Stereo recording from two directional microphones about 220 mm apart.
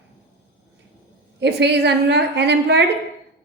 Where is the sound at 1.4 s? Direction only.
50° right (ahead or behind).